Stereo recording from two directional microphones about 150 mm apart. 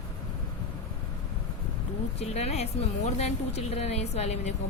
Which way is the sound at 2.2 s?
45° left (ahead or behind).